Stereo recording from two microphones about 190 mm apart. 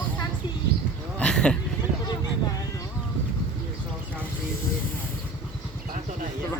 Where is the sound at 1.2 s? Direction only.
5° left (ahead or behind).